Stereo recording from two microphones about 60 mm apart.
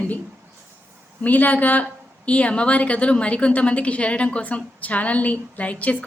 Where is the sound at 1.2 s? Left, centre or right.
Left.